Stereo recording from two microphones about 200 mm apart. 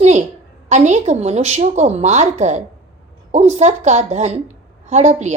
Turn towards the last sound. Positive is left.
turn(degrees=-35)  # may be behind; listen again after turning